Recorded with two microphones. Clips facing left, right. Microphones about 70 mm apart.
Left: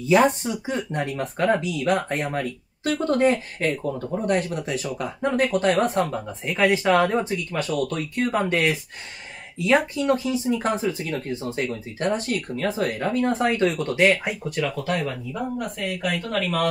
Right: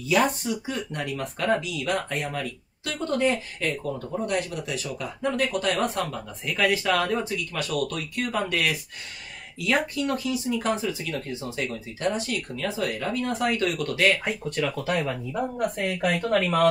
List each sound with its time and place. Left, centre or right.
0.0 s speech: left
3.3 s speech: left
4.4 s speech: left
12.0 s speech: left
14.6 s speech: centre
15.0 s speech: right